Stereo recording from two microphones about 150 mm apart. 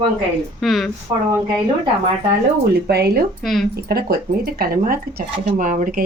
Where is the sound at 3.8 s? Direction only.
90° right.